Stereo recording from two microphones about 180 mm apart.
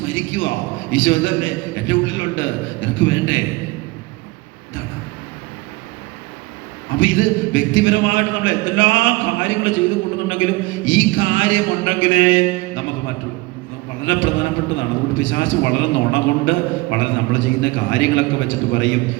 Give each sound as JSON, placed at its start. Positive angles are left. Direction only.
{"t": 0.0, "sound": "a man's voice", "side_deg": 90}
{"t": 7.0, "sound": "a man's voice", "side_deg": 90}
{"t": 14.0, "sound": "a man's voice", "side_deg": 90}